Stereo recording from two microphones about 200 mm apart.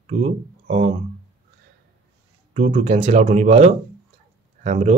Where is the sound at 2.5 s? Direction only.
35° right (ahead or behind).